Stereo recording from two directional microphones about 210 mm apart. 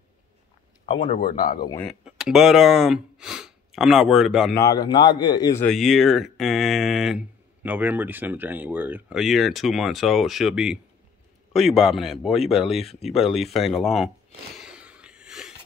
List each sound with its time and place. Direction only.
1.4 s speech: 45° left (ahead or behind)
1.9 s speech: centre (ahead or behind)
4.6 s a man's voice: 20° left (ahead or behind)
5.7 s speech: centre (ahead or behind)
14.6 s a sound: 5° right (ahead or behind)